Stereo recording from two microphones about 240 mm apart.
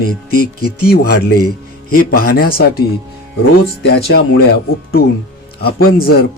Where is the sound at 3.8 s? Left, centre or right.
Left.